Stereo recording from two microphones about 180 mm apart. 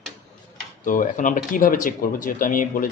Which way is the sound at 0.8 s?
50° left (ahead or behind).